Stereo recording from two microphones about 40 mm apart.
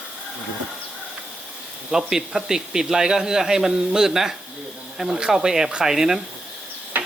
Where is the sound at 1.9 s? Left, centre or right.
Centre.